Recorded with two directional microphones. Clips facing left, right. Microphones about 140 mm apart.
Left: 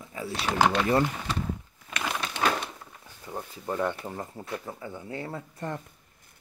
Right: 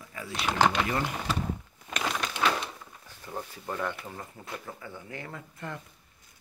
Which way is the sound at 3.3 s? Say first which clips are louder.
Left 1 dB; 20° left (ahead or behind).